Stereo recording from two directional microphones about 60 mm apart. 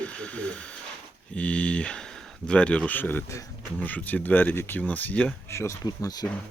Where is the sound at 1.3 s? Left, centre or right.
Left.